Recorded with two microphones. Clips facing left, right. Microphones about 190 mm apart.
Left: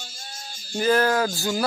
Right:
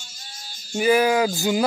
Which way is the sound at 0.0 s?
50° left (ahead or behind).